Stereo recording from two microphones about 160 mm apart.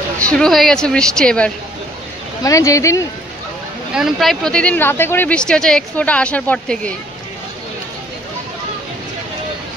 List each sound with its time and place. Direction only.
0.2 s a woman's voice: 5° left (ahead or behind)
2.4 s speech: 20° left (ahead or behind)
3.9 s speech: centre (ahead or behind)